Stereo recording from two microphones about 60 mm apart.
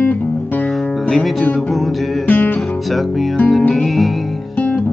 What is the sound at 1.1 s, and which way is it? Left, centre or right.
Music, centre.